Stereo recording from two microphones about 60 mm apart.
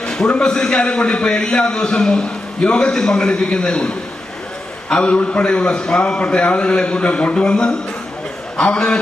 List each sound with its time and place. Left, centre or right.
0.0 s a man's voice: centre